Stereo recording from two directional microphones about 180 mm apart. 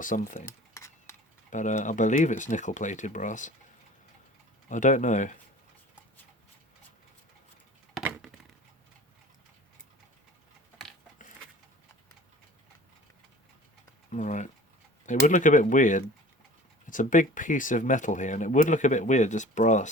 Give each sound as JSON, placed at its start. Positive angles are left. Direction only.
{"t": 0.0, "sound": "speech", "side_deg": 45}
{"t": 0.4, "sound": "a sound", "side_deg": 15}
{"t": 1.5, "sound": "speech", "side_deg": 45}
{"t": 4.7, "sound": "speech", "side_deg": 45}
{"t": 8.0, "sound": "a sound", "side_deg": 0}
{"t": 14.1, "sound": "typing", "side_deg": 40}
{"t": 15.3, "sound": "speech", "side_deg": 45}